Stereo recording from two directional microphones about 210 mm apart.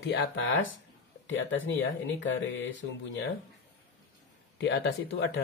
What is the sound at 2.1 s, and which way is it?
Speech, 65° left (ahead or behind).